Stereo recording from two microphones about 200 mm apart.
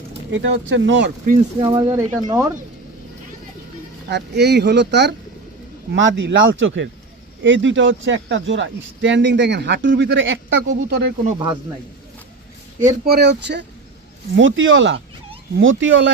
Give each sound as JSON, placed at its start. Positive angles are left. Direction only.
{"t": 0.3, "sound": "speech", "side_deg": -65}
{"t": 1.6, "sound": "speech", "side_deg": -25}
{"t": 4.1, "sound": "speech", "side_deg": -55}
{"t": 5.9, "sound": "speech", "side_deg": -70}
{"t": 13.1, "sound": "speech", "side_deg": -55}
{"t": 14.3, "sound": "speech", "side_deg": -70}